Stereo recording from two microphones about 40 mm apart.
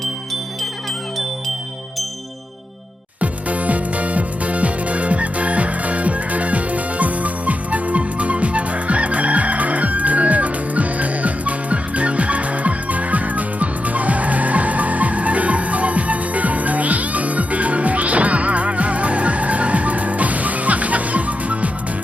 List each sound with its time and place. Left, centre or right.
3.2 s music: right